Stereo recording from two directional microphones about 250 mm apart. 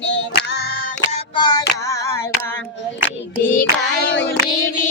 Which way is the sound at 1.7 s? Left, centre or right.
Centre.